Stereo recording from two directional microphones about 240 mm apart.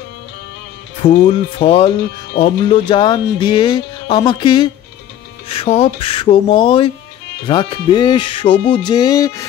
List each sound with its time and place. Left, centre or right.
1.0 s speech: left
8.8 s music: centre